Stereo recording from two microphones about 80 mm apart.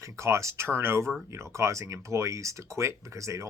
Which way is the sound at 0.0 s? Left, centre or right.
Right.